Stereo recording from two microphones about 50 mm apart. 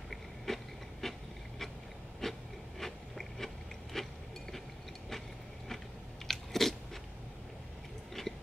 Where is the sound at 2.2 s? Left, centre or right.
Centre.